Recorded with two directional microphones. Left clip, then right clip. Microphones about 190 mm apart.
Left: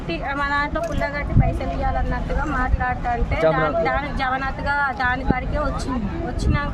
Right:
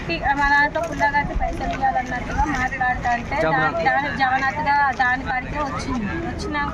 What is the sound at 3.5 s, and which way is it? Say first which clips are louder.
Speech: right 1 dB; 30° left (ahead or behind).